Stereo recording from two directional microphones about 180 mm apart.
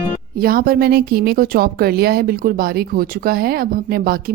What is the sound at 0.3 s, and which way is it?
A woman's voice, 55° right (ahead or behind).